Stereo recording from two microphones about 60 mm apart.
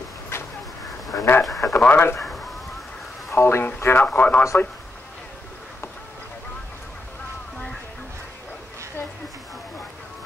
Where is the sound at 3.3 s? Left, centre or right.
Left.